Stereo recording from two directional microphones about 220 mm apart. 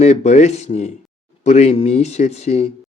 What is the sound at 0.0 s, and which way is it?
Speech, 30° left (ahead or behind).